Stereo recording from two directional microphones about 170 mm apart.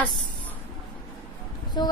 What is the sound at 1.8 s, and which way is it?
Speech, 25° left (ahead or behind).